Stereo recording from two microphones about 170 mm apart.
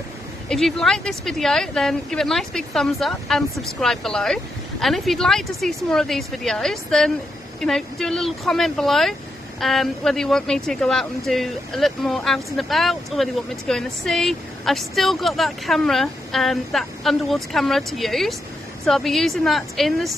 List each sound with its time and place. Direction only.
0.5 s a woman's voice: centre (ahead or behind)